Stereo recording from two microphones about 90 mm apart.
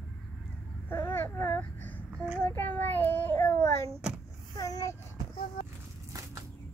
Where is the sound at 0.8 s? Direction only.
25° left (ahead or behind).